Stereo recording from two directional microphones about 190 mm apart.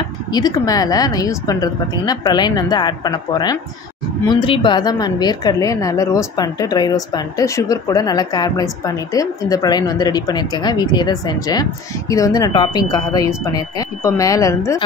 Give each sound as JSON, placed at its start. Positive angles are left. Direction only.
{"t": 0.3, "sound": "a woman's voice", "side_deg": 20}